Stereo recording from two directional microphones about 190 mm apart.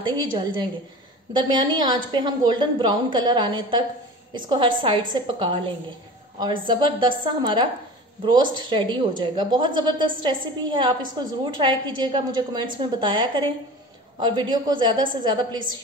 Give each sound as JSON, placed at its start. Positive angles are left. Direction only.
{"t": 0.0, "sound": "a woman's voice", "side_deg": -25}